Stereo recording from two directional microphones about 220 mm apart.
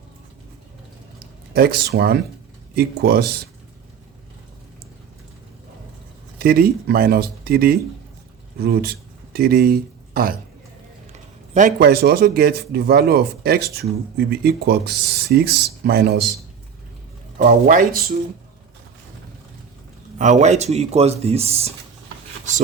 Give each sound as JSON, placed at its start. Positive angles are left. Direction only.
{"t": 1.5, "sound": "speech", "side_deg": -45}
{"t": 6.4, "sound": "speech", "side_deg": -45}
{"t": 11.5, "sound": "speech", "side_deg": -40}
{"t": 17.3, "sound": "speech", "side_deg": -40}
{"t": 20.1, "sound": "speech", "side_deg": -35}